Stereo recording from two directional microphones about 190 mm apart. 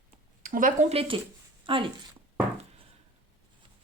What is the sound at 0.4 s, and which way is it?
Speech, 45° right (ahead or behind).